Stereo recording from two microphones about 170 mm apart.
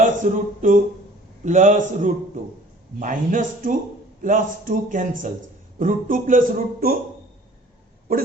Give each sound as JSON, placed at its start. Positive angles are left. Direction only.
{"t": 0.2, "sound": "a man's voice", "side_deg": -50}